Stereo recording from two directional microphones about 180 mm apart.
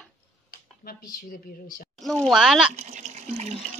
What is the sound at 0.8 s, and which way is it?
Speech, 55° left (ahead or behind).